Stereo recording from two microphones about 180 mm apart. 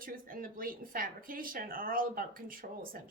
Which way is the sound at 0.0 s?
50° right (ahead or behind).